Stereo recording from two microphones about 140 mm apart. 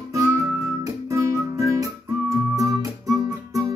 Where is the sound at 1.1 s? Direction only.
25° right (ahead or behind).